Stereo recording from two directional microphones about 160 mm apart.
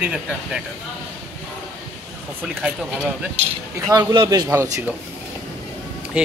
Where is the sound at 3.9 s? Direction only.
25° right (ahead or behind).